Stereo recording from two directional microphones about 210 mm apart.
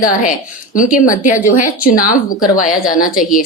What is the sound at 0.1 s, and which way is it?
A woman's voice, 40° left (ahead or behind).